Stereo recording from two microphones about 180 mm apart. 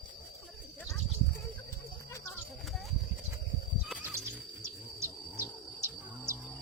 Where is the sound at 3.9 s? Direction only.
10° right (ahead or behind).